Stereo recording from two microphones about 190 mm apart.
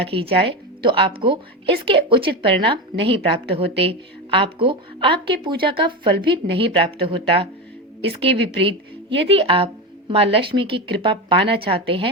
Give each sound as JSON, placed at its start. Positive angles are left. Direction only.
{"t": 0.0, "sound": "a woman's voice", "side_deg": -30}